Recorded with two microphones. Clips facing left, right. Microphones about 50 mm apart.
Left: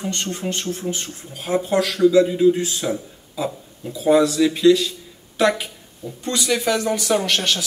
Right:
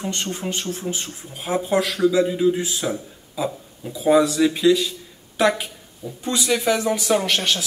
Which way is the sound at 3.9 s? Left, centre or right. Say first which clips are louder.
Left 1 dB; centre.